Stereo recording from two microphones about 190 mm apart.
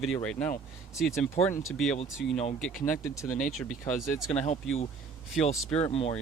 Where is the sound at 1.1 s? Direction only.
10° left (ahead or behind).